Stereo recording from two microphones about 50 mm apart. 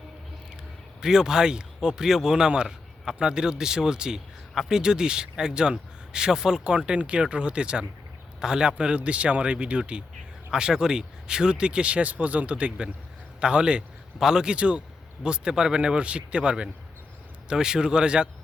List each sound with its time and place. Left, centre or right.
1.0 s a man's voice: centre